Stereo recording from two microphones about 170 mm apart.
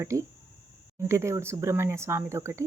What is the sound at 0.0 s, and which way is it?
Speech, 15° right (ahead or behind).